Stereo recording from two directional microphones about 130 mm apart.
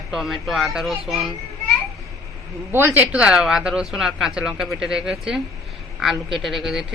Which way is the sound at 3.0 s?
10° right (ahead or behind).